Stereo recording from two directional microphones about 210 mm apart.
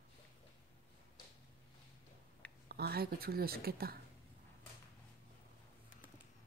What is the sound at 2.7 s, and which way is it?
Speech, 50° right (ahead or behind).